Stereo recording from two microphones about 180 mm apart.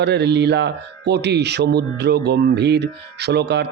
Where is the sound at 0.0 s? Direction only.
70° right (ahead or behind).